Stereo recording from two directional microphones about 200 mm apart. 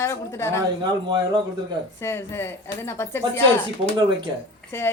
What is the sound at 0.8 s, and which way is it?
Speech, 20° right (ahead or behind).